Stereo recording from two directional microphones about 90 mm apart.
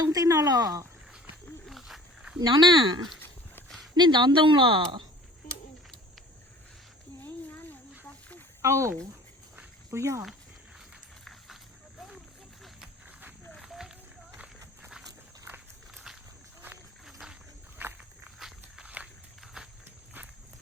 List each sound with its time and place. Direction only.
0.0 s speech: 40° right (ahead or behind)
1.6 s a sound: centre (ahead or behind)
2.4 s speech: 50° right (ahead or behind); by 5.0 s 75° right (ahead or behind)
7.2 s snake: 20° left (ahead or behind)
8.6 s speech: 30° right (ahead or behind)
13.6 s a sound: 5° right (ahead or behind)
15.4 s walk: 25° right (ahead or behind)
17.1 s wild animals: 5° right (ahead or behind)
17.7 s walk: 20° right (ahead or behind)
18.3 s walk: 5° right (ahead or behind)